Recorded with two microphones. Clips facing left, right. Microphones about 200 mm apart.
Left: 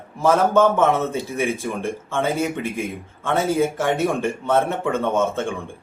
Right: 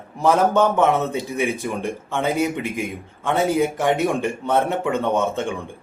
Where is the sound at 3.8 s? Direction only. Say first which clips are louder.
Right 1 dB; 15° right (ahead or behind).